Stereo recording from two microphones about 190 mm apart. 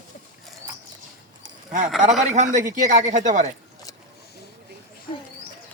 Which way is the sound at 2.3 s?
40° right (ahead or behind).